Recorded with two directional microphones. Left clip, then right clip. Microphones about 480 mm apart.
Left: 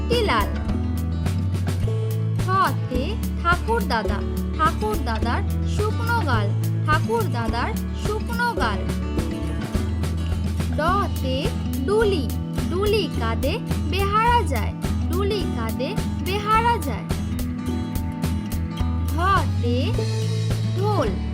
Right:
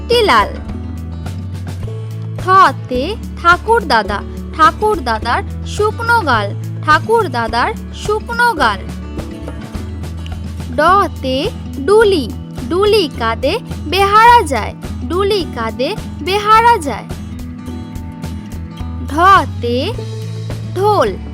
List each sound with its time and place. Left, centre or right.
0.1 s speech: centre
2.5 s speech: centre
4.1 s music: centre
5.2 s speech: centre
10.8 s speech: centre
19.1 s speech: centre